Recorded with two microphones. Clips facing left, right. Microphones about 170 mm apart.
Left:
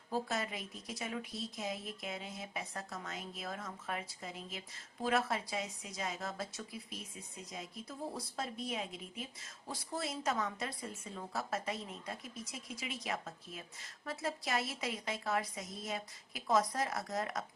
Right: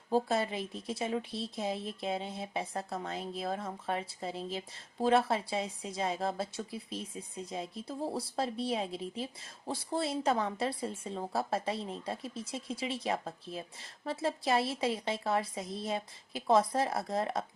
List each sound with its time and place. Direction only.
0.1 s a woman's voice: 30° right (ahead or behind)